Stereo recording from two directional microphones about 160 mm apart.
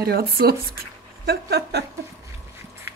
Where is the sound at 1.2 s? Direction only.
85° right.